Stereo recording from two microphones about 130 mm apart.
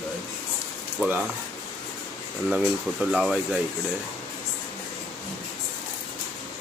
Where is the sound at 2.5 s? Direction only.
10° right (ahead or behind).